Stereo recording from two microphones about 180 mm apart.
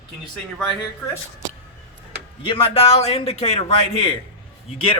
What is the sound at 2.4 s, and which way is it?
Speech, 30° left (ahead or behind).